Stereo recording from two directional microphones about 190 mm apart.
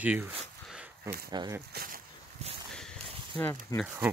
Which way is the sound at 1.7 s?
50° right (ahead or behind).